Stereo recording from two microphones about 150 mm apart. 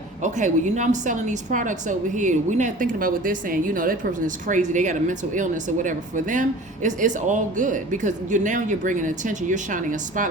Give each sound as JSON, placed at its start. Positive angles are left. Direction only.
{"t": 0.2, "sound": "a woman's voice", "side_deg": -55}